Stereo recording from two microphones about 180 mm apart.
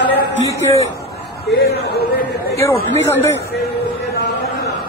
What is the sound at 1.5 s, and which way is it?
Speech, 60° left (ahead or behind).